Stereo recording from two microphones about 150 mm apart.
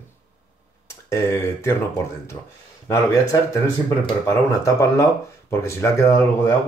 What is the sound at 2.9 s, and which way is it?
Speech, 20° left (ahead or behind).